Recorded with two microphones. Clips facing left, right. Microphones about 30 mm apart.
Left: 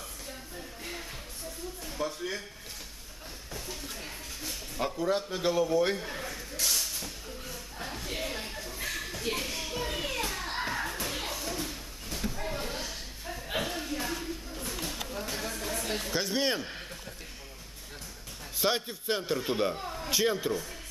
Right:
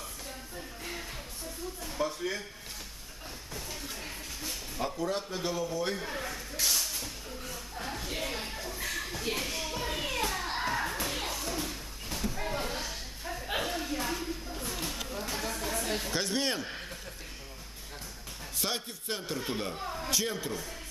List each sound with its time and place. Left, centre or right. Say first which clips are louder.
1.8 s speech: right 2 dB; centre
3.5 s a sound: left 1 dB; centre
4.7 s a man's voice: left 3 dB; centre
5.9 s snake: right 1 dB; centre
8.7 s children playing: left 1 dB; centre
11.2 s a sound: even; centre
18.6 s a man's voice: left 6 dB; centre
20.1 s a man's voice: left 6 dB; centre